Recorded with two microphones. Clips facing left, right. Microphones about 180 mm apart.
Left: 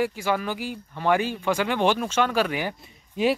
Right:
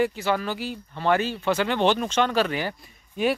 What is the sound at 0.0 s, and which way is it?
Speech, 10° left (ahead or behind).